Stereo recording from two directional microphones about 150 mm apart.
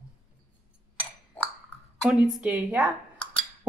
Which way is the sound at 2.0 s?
Centre (ahead or behind).